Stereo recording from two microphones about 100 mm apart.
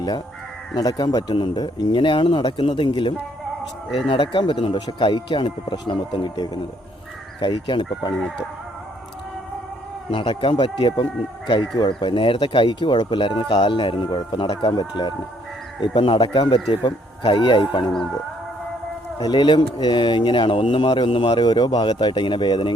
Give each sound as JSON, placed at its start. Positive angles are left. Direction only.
{"t": 0.7, "sound": "speech", "side_deg": 40}
{"t": 10.1, "sound": "speech", "side_deg": 50}
{"t": 19.2, "sound": "speech", "side_deg": 50}